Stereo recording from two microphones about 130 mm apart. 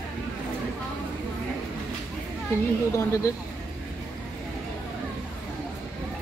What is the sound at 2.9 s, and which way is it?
Speech, 20° left (ahead or behind).